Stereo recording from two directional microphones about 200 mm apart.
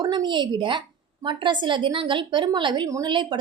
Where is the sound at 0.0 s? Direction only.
20° right (ahead or behind).